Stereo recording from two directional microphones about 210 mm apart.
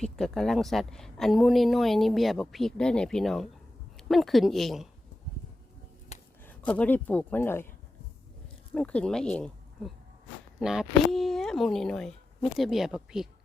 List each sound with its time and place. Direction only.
0.0 s a woman's voice: centre (ahead or behind)
6.1 s a sound: 35° left (ahead or behind)
6.5 s speech: 5° left (ahead or behind)
8.7 s a woman's voice: 5° left (ahead or behind)